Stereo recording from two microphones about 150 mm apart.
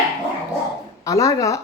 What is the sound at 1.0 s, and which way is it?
Speech, 20° left (ahead or behind).